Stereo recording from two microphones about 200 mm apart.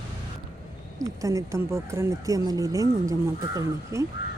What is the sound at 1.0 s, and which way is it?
Speech, 15° right (ahead or behind).